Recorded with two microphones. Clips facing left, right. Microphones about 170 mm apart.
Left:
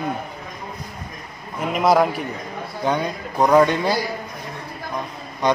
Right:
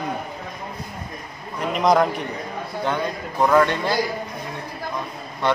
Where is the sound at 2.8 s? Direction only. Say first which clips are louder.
Left 2 dB; 15° left (ahead or behind).